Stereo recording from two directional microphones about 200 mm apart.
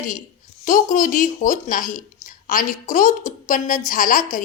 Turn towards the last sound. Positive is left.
turn(degrees=40)  # may be behind; listen again after turning